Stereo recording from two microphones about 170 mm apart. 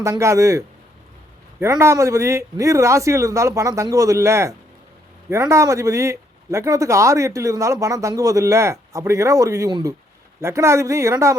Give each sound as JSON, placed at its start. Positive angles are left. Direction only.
{"t": 0.0, "sound": "speech", "side_deg": -15}